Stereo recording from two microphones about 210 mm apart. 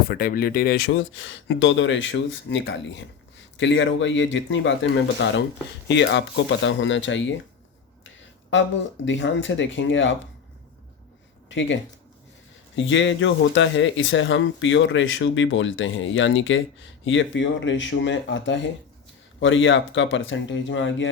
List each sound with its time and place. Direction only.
0.1 s speech: 45° left (ahead or behind); by 10.2 s 60° left (ahead or behind)
11.4 s speech: 60° left (ahead or behind)